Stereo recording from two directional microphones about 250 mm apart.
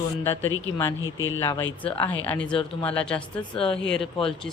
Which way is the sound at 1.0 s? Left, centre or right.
Left.